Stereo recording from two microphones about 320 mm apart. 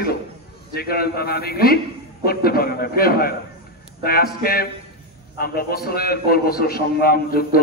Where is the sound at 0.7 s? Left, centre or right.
Left.